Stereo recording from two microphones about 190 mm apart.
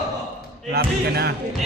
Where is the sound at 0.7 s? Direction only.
55° right (ahead or behind).